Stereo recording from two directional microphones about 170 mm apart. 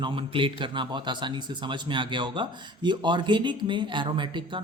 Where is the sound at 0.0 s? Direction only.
30° right (ahead or behind).